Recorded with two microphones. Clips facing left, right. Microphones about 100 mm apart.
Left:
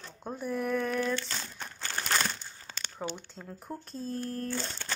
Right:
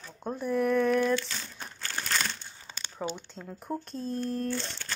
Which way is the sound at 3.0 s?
5° right (ahead or behind).